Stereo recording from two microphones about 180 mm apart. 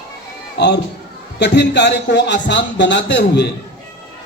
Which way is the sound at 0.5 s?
70° left (ahead or behind).